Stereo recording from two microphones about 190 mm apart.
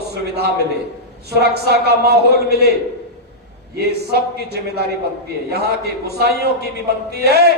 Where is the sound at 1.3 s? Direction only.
55° right (ahead or behind).